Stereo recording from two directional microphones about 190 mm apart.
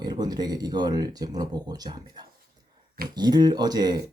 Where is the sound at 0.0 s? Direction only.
20° right (ahead or behind).